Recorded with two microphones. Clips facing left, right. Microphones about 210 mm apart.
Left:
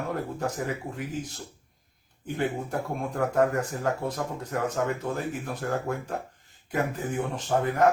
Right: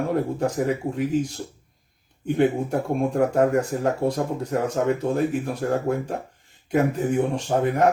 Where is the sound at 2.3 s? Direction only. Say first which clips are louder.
Right 8 dB; 20° right (ahead or behind).